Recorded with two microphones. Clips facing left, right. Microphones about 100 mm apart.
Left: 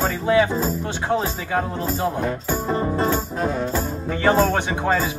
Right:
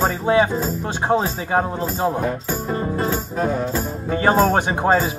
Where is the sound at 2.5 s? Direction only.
25° left (ahead or behind).